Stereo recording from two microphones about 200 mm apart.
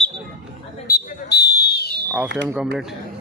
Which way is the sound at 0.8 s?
50° left (ahead or behind).